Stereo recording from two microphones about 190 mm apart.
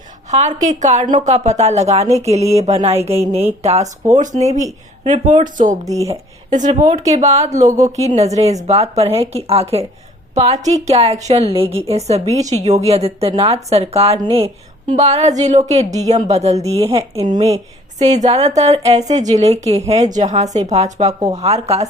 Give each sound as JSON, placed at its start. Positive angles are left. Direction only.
{"t": 0.3, "sound": "a woman's voice", "side_deg": -40}